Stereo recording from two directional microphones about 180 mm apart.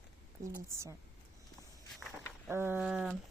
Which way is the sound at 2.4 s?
10° right (ahead or behind).